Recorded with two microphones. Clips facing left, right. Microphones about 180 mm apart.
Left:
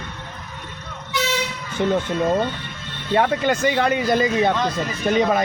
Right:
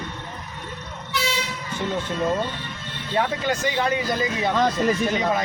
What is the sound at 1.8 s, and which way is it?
Speech, 60° left (ahead or behind).